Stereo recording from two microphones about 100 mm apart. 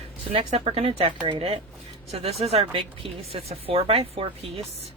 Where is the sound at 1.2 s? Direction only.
60° right (ahead or behind).